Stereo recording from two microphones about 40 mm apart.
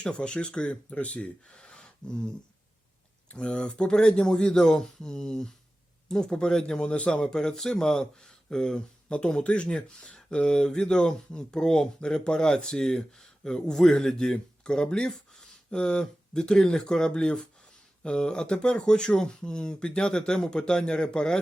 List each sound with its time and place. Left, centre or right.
0.0 s speech: left
3.3 s speech: left
6.9 s speech: left